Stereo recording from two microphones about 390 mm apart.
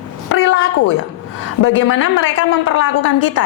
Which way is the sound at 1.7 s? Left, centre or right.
Left.